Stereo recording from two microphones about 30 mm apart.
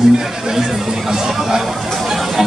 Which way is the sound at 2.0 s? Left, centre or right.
Centre.